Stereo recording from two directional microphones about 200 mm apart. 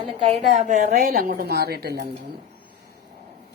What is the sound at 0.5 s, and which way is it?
Speech, 40° right (ahead or behind).